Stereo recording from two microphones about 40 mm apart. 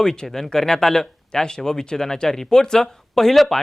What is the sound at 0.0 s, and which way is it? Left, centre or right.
Speech, centre.